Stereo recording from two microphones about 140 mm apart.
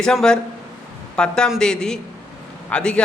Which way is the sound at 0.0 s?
5° left (ahead or behind).